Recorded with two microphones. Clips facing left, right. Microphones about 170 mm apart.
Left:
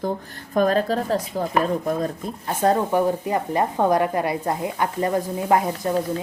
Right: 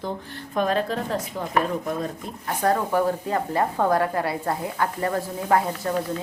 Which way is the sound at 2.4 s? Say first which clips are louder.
Left 3 dB; 25° left (ahead or behind).